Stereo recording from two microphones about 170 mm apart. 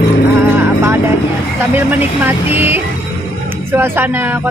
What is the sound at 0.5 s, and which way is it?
Music, 15° right (ahead or behind).